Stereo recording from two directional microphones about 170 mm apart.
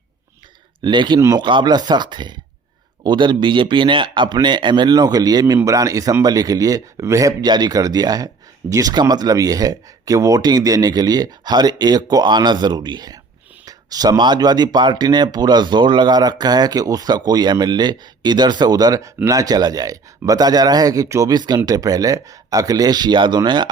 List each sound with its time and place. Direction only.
0.8 s speech: 25° right (ahead or behind)